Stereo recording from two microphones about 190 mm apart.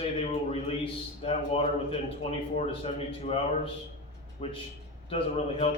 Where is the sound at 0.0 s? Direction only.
30° left (ahead or behind).